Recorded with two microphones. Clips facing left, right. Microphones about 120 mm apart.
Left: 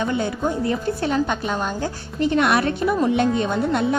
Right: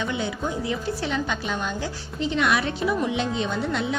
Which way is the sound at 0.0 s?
50° left (ahead or behind).